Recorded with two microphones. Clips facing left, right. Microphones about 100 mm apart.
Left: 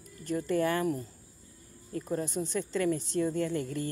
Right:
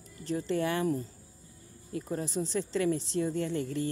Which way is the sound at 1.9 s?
40° left (ahead or behind).